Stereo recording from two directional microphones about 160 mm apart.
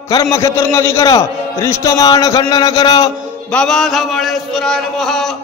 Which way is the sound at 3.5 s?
5° left (ahead or behind).